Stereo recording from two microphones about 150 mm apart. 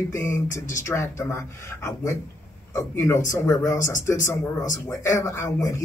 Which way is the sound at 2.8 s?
20° left (ahead or behind).